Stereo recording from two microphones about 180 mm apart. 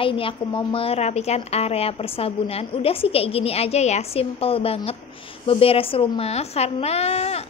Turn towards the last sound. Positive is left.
turn(degrees=35)  # may be behind; listen again after turning